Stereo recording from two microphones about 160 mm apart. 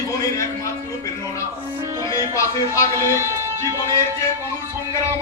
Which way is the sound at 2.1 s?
20° left (ahead or behind).